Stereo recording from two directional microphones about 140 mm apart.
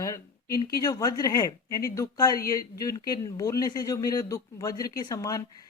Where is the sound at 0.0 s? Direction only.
25° left (ahead or behind).